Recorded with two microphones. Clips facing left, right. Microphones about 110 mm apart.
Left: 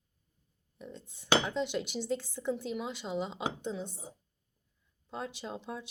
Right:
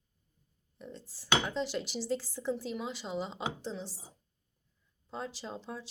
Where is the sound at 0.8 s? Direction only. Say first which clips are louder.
Even; centre (ahead or behind).